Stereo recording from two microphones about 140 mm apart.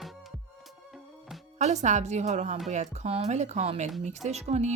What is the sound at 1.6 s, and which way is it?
Speech, 55° right (ahead or behind).